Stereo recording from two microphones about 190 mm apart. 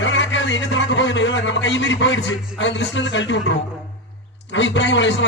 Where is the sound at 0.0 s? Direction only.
75° left (ahead or behind).